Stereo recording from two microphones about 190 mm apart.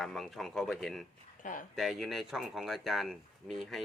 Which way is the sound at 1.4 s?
45° left (ahead or behind).